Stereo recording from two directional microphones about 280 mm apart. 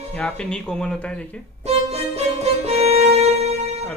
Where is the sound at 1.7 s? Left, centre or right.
Right.